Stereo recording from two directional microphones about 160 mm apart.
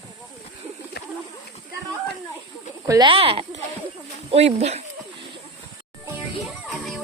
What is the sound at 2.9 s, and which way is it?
Speech, 30° right (ahead or behind).